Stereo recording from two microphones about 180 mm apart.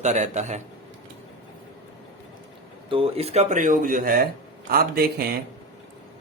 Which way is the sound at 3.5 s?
45° right (ahead or behind).